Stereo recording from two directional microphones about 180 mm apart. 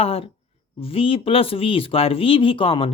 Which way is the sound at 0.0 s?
30° left (ahead or behind).